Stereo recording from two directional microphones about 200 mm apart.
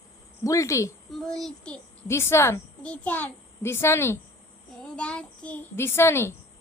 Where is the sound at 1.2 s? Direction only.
Centre (ahead or behind).